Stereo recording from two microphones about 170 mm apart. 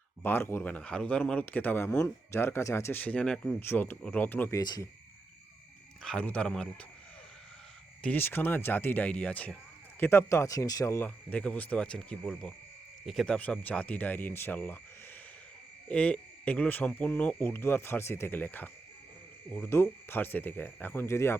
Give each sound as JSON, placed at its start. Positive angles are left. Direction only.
{"t": 0.2, "sound": "speech", "side_deg": 10}
{"t": 4.6, "sound": "speech", "side_deg": 25}
{"t": 6.0, "sound": "a man's voice", "side_deg": 5}
{"t": 8.0, "sound": "speech", "side_deg": 10}
{"t": 15.9, "sound": "speech", "side_deg": 5}